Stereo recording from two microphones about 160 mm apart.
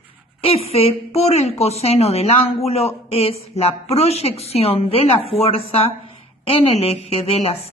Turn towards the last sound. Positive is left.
turn(degrees=40)  # may be behind; listen again after turning